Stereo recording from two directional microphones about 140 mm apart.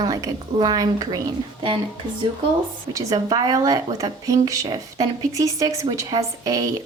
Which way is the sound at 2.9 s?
25° right (ahead or behind).